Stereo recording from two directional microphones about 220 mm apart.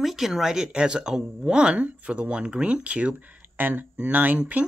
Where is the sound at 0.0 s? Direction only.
Centre (ahead or behind).